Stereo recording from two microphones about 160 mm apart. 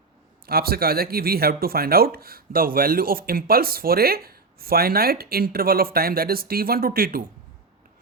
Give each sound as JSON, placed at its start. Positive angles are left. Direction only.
{"t": 0.4, "sound": "speech", "side_deg": -70}